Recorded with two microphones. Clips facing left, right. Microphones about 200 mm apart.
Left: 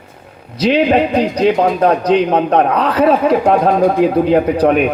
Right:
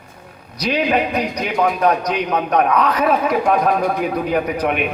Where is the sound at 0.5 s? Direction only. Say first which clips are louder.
Left 6 dB; 25° left (ahead or behind).